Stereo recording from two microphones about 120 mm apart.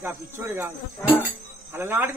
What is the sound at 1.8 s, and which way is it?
Speech, 20° right (ahead or behind).